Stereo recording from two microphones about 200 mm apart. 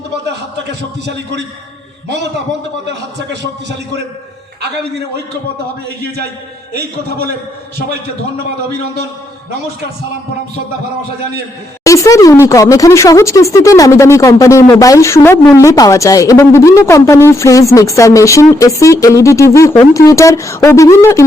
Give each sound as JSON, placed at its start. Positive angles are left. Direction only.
{"t": 0.3, "sound": "a man's voice", "side_deg": -60}
{"t": 6.7, "sound": "a man's voice", "side_deg": -55}
{"t": 11.8, "sound": "speech", "side_deg": 15}